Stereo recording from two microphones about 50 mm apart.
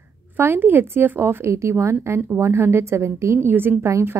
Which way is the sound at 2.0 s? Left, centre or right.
Right.